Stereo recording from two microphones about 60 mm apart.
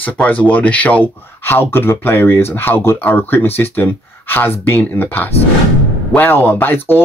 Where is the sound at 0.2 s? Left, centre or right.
Left.